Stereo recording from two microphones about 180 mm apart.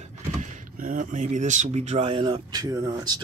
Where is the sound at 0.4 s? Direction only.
50° right (ahead or behind).